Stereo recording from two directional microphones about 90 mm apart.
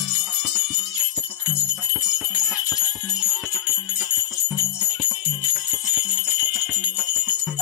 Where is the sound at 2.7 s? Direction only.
Centre (ahead or behind).